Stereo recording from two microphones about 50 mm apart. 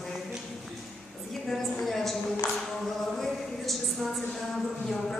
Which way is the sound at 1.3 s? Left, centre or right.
Centre.